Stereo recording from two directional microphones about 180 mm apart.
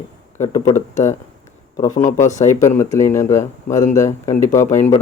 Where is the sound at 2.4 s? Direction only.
15° left (ahead or behind).